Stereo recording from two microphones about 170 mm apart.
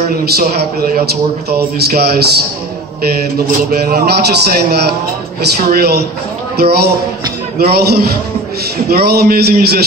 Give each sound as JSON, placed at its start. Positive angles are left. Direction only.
{"t": 0.2, "sound": "a man's voice", "side_deg": -65}
{"t": 3.7, "sound": "a man's voice", "side_deg": -65}